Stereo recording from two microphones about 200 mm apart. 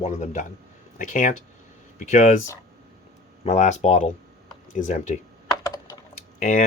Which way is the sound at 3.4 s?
35° left (ahead or behind).